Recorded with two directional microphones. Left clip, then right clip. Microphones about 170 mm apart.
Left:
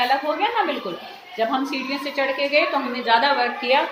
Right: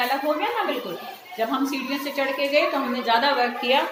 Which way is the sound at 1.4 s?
15° left (ahead or behind).